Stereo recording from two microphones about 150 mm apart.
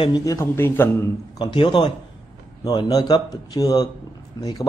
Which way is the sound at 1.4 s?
35° left (ahead or behind).